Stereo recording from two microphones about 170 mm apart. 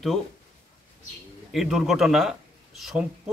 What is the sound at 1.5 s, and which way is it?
Speech, centre (ahead or behind).